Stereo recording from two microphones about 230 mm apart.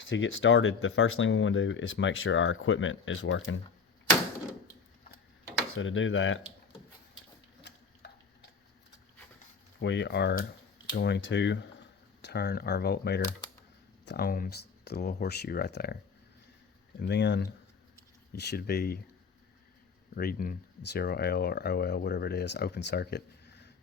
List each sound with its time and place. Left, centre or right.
0.1 s speech: left
5.7 s speech: left
9.8 s speech: left
17.0 s speech: left
20.1 s speech: left